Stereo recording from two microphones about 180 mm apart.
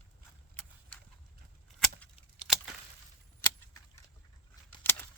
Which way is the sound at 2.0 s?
Centre (ahead or behind).